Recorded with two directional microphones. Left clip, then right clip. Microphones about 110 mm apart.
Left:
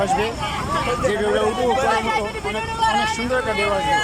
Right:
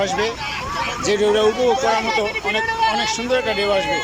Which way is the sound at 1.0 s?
20° right (ahead or behind).